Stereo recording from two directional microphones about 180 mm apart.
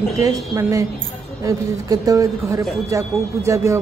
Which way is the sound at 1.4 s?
20° right (ahead or behind).